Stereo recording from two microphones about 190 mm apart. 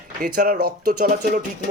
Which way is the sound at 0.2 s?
50° right (ahead or behind).